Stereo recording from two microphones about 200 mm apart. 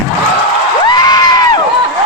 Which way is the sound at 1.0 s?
20° left (ahead or behind).